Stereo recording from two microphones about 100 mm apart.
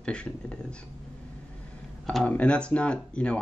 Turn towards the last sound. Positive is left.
turn(degrees=10)  # may be behind; listen again after turning